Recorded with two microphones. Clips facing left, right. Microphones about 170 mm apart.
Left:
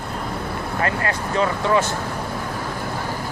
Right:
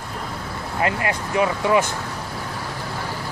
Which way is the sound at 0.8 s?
20° right (ahead or behind).